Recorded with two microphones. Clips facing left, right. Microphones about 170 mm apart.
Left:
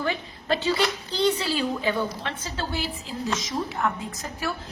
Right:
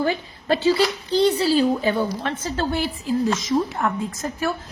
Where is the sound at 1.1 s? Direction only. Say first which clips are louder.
Right 8 dB; 35° right (ahead or behind).